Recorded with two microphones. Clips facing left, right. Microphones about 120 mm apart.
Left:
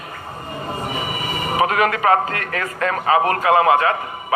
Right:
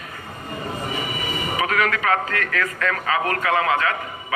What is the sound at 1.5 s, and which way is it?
A man's voice, 30° left (ahead or behind).